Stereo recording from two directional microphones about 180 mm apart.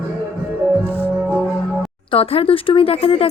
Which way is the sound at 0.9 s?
10° left (ahead or behind).